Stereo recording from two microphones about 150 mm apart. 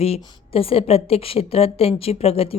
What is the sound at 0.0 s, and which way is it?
A woman's voice, 40° left (ahead or behind).